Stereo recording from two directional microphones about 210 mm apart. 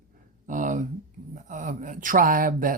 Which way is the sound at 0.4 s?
40° right (ahead or behind).